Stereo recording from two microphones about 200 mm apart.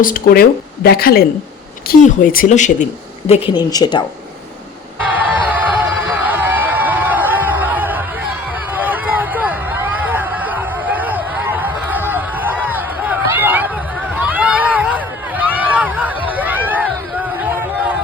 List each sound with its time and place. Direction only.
0.0 s a woman's voice: 45° left (ahead or behind); by 4.0 s 20° left (ahead or behind)
5.1 s music: 10° right (ahead or behind)
8.7 s a sound: 10° right (ahead or behind)